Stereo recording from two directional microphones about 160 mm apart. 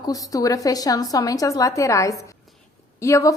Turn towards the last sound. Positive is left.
turn(degrees=20)  # may be behind; listen again after turning